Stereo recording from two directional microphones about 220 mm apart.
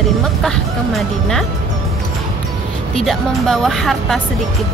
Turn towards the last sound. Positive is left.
turn(degrees=0)  # may be behind; listen again after turning